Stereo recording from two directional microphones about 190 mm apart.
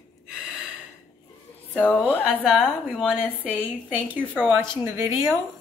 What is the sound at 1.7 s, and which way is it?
A woman's voice, 10° left (ahead or behind).